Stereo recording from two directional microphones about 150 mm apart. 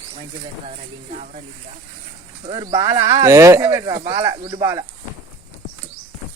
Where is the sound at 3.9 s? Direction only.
40° right (ahead or behind).